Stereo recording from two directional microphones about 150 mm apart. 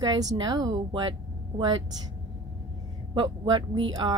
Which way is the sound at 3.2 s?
30° right (ahead or behind).